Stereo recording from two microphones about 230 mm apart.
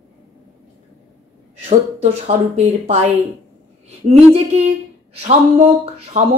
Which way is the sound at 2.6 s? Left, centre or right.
Right.